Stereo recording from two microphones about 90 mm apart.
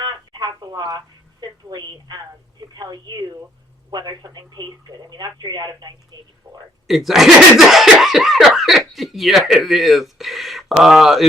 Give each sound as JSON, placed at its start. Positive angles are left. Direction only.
{"t": 0.0, "sound": "telephone", "side_deg": -45}
{"t": 1.4, "sound": "a woman's voice", "side_deg": -50}
{"t": 6.8, "sound": "speech", "side_deg": 0}